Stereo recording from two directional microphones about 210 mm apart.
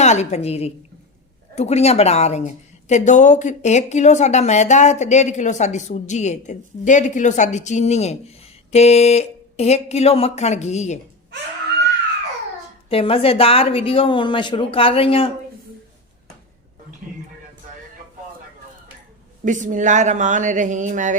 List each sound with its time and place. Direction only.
0.0 s speech: 30° left (ahead or behind)
12.9 s a woman's voice: 25° left (ahead or behind)
19.5 s speech: 35° right (ahead or behind)